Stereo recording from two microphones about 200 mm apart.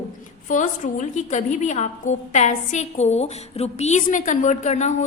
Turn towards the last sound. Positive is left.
turn(degrees=35)  # may be behind; listen again after turning